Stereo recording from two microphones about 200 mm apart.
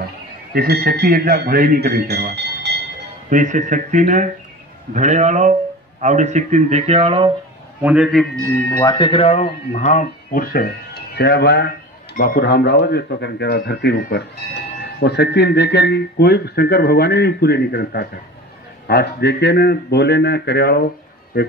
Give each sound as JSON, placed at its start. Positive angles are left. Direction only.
{"t": 0.6, "sound": "speech", "side_deg": -50}
{"t": 3.3, "sound": "a man's voice", "side_deg": -40}
{"t": 7.8, "sound": "a man's voice", "side_deg": -5}
{"t": 8.7, "sound": "speech", "side_deg": 20}